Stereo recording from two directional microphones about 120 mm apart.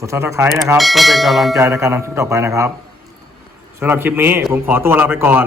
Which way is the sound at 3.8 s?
15° right (ahead or behind).